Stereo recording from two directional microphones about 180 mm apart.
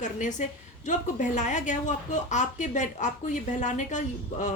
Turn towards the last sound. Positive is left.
turn(degrees=45)  # may be behind; listen again after turning